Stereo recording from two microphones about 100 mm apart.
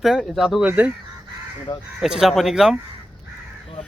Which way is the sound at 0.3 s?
Centre (ahead or behind).